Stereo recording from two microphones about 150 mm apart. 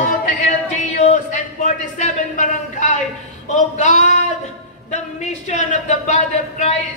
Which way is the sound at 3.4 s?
55° left (ahead or behind).